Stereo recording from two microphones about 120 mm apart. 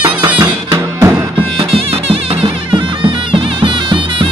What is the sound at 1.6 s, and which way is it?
Music, 50° right (ahead or behind).